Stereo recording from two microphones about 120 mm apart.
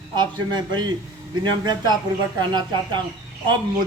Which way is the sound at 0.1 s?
40° right (ahead or behind).